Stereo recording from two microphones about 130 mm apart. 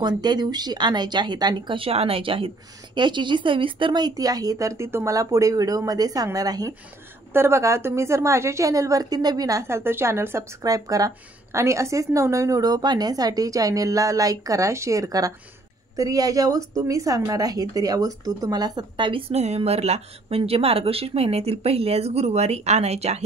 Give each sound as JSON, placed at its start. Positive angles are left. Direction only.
{"t": 0.2, "sound": "a woman's voice", "side_deg": -35}